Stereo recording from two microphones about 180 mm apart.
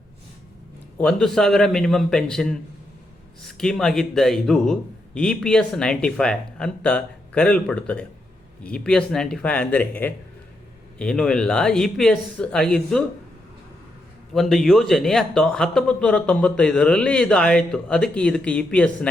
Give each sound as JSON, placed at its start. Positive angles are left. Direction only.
{"t": 0.9, "sound": "speech", "side_deg": 5}
{"t": 14.3, "sound": "speech", "side_deg": 0}